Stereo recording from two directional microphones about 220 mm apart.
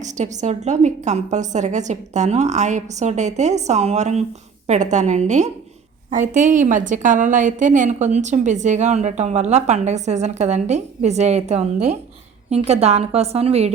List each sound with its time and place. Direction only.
0.0 s a woman's voice: 30° right (ahead or behind)